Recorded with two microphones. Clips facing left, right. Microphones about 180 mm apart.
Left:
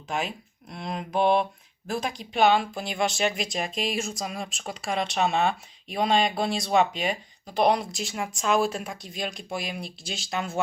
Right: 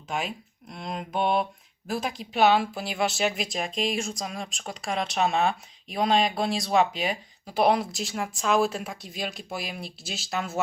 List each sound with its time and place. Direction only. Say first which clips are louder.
0.1 s speech: left 1 dB; centre (ahead or behind)